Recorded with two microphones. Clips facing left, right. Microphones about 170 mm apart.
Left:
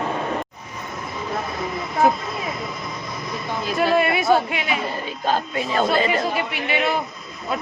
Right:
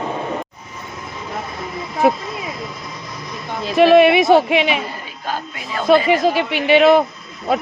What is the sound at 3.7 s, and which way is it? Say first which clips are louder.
Speech: right 10 dB; 90° right.